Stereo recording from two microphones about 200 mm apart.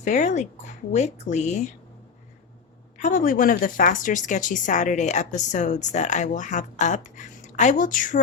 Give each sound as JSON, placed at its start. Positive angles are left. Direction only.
{"t": 0.0, "sound": "a woman's voice", "side_deg": 35}
{"t": 3.0, "sound": "a woman's voice", "side_deg": 40}